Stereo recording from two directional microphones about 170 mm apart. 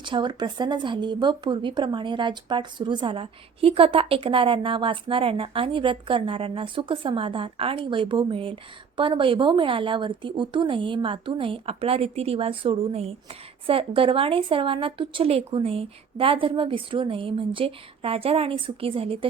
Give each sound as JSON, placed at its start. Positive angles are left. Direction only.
{"t": 0.0, "sound": "speech", "side_deg": -25}